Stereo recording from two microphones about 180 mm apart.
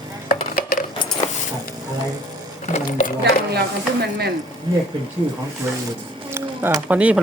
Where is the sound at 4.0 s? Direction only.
65° right (ahead or behind).